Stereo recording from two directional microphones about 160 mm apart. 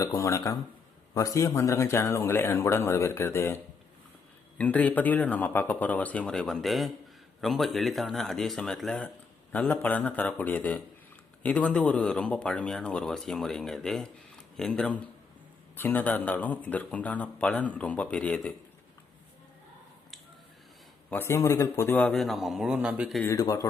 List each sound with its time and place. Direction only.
0.0 s speech: 20° left (ahead or behind)
21.1 s speech: 15° left (ahead or behind); by 23.2 s 5° right (ahead or behind)
23.2 s speech: 20° left (ahead or behind)